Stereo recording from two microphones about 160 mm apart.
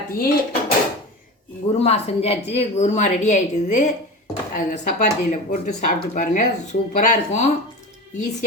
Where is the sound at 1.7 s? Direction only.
40° left (ahead or behind).